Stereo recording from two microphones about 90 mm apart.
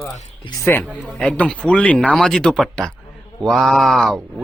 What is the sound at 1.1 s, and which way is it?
Speech, 10° left (ahead or behind).